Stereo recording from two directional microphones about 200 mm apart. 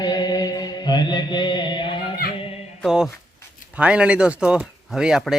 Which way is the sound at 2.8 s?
Centre (ahead or behind).